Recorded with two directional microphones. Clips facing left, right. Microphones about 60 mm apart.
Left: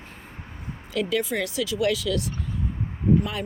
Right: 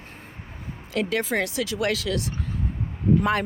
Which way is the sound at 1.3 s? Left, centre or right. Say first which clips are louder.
Even; right.